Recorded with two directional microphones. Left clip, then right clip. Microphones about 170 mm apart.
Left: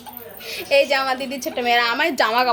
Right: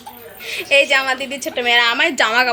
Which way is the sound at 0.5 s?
Centre (ahead or behind).